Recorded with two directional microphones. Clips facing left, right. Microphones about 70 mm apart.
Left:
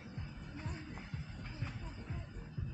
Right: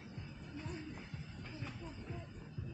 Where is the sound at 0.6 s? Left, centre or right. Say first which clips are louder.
Right 1 dB; centre.